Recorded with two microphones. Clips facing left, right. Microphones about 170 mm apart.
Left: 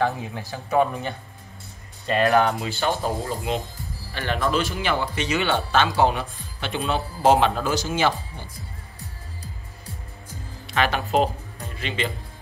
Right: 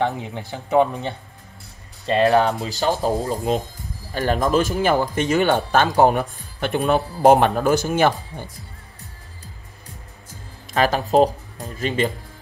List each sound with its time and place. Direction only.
0.0 s speech: 20° right (ahead or behind); by 8.1 s 55° right (ahead or behind)
10.7 s speech: 40° right (ahead or behind)